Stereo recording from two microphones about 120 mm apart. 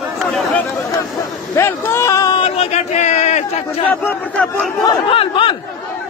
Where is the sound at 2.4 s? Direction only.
65° left (ahead or behind).